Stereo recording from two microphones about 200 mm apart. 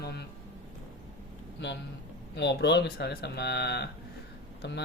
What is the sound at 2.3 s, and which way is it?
Speech, 60° left (ahead or behind).